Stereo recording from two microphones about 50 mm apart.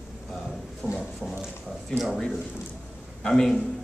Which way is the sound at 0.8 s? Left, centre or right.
Left.